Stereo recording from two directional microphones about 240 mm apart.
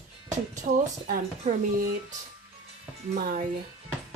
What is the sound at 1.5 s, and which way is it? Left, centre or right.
Speech, right.